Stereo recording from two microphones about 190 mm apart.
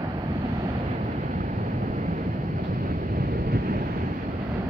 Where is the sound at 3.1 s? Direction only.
50° right (ahead or behind).